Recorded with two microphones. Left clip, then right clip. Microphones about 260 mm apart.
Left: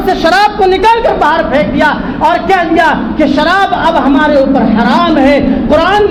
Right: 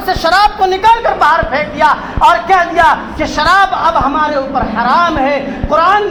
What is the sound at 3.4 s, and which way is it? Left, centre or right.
Speech, centre.